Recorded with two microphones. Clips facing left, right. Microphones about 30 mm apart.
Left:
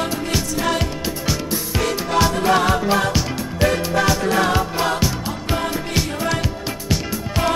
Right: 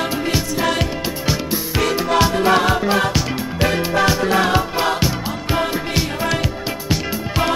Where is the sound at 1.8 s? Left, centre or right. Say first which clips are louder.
Right 4 dB; centre.